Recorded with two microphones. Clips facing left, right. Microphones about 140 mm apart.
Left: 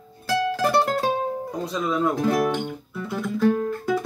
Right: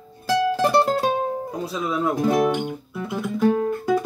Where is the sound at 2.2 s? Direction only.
15° right (ahead or behind).